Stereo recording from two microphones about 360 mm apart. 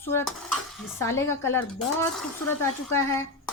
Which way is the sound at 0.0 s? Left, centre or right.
Centre.